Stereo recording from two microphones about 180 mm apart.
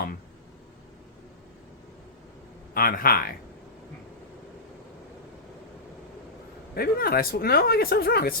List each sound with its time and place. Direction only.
2.7 s speech: 55° left (ahead or behind)
6.7 s speech: 55° left (ahead or behind)